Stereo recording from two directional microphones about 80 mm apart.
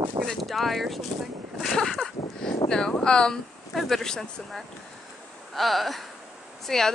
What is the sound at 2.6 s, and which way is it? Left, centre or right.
Speech, centre.